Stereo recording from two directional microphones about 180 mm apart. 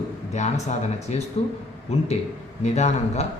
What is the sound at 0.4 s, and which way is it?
Speech, 40° left (ahead or behind).